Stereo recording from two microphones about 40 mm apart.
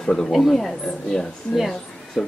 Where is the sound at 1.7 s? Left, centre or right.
Centre.